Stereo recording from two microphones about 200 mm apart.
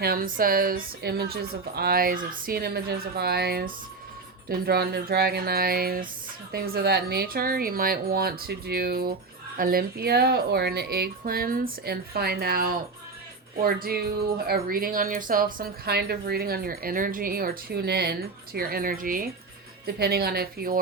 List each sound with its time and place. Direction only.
0.0 s speech: 50° right (ahead or behind)